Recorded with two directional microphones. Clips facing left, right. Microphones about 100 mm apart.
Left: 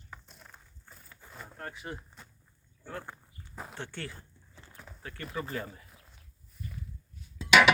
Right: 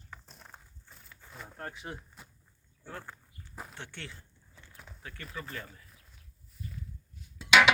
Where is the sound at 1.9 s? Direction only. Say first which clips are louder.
Left 1 dB; 5° right (ahead or behind).